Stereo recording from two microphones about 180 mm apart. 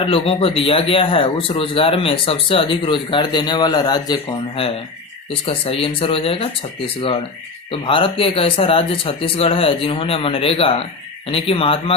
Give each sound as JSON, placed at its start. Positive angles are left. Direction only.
{"t": 0.0, "sound": "speech", "side_deg": 30}